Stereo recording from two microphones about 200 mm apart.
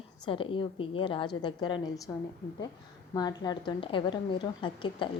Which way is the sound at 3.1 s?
20° left (ahead or behind).